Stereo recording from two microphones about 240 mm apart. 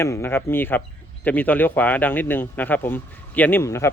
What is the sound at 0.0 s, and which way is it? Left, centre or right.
Speech, centre.